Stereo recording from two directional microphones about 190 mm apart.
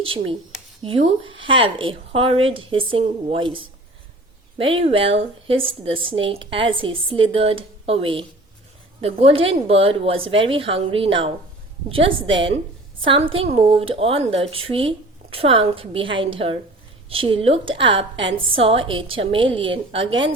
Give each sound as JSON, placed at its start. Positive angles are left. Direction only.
{"t": 0.0, "sound": "a woman's voice", "side_deg": -30}